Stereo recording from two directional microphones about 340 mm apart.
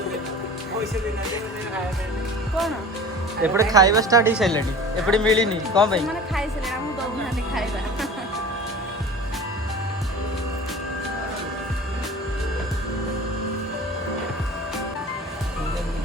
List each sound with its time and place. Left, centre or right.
3.4 s a woman's voice: centre